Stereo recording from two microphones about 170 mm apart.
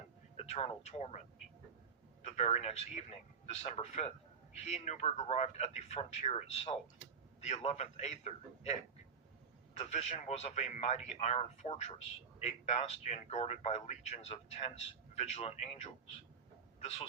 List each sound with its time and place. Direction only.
0.3 s speech: 40° left (ahead or behind)
2.2 s a man's voice: 40° left (ahead or behind)
9.7 s a man's voice: 40° left (ahead or behind)